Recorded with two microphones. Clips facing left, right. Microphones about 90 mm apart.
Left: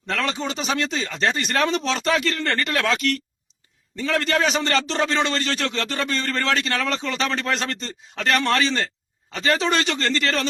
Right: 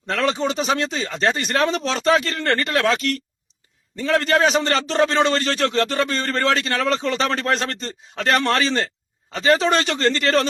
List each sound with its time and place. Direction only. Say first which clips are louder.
0.1 s a man's voice: right 4 dB; 30° right (ahead or behind)